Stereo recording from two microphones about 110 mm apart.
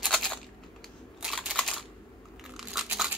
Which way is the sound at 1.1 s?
5° right (ahead or behind).